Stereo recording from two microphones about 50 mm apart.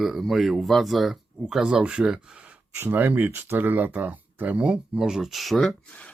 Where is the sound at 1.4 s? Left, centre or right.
Centre.